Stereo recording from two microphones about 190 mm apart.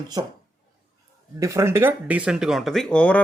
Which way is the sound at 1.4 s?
15° right (ahead or behind).